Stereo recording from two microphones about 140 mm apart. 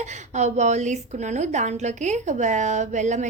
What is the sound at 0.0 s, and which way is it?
A woman's voice, 55° right (ahead or behind).